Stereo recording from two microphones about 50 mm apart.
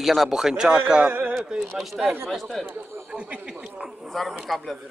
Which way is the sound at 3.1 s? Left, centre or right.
Right.